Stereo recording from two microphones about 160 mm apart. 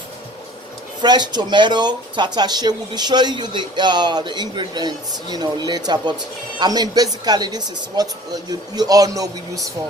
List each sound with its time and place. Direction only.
1.0 s speech: 25° right (ahead or behind)